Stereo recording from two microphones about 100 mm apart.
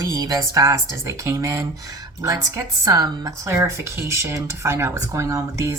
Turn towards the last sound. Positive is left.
turn(degrees=-30)  # may be behind; listen again after turning